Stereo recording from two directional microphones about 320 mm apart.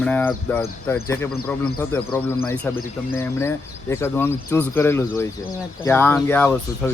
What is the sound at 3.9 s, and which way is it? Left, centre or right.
Speech, centre.